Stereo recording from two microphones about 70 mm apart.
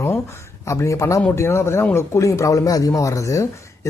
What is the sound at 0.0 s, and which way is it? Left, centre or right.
A woman's voice, left.